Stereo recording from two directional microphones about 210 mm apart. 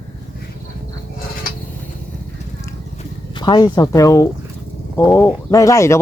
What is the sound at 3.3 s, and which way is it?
Speech, 20° left (ahead or behind).